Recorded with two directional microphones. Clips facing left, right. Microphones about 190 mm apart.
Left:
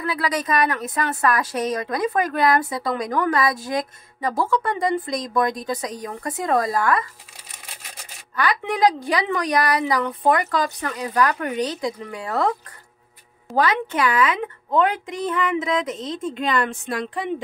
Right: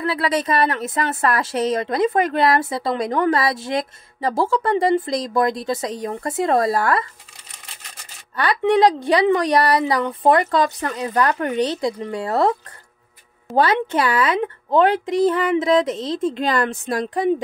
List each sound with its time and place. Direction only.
0.0 s speech: 30° right (ahead or behind)
8.4 s speech: 30° right (ahead or behind)
13.6 s a woman's voice: 30° right (ahead or behind)